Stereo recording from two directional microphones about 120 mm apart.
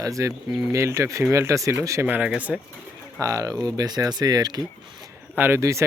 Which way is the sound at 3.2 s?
30° right (ahead or behind).